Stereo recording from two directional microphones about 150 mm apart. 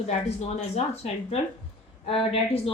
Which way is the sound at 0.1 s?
45° left (ahead or behind).